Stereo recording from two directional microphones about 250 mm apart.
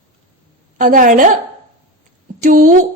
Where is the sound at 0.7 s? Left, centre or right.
Right.